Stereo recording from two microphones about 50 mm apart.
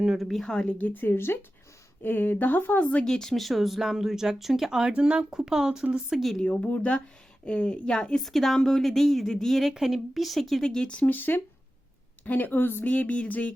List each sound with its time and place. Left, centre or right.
0.2 s speech: centre
0.4 s a woman's voice: centre
0.8 s a woman's voice: left
2.0 s speech: left
3.0 s speech: centre
6.4 s speech: left
6.7 s speech: left
7.4 s speech: centre
8.2 s speech: centre
10.8 s speech: left
11.1 s speech: left
12.8 s speech: left